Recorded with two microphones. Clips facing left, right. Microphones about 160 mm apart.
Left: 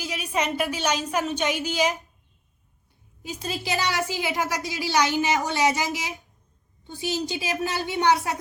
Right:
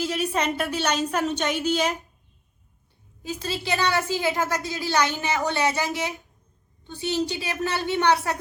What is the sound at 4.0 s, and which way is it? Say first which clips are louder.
Speech: right 2 dB; 15° left (ahead or behind).